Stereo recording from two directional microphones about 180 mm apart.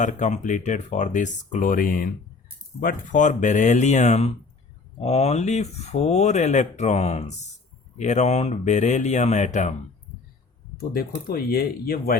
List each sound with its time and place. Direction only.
0.0 s speech: 45° left (ahead or behind)
10.8 s speech: 55° left (ahead or behind)